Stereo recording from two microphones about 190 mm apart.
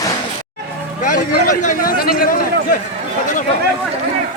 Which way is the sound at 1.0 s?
40° left (ahead or behind).